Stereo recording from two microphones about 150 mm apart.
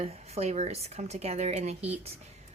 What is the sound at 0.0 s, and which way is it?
Speech, 45° right (ahead or behind).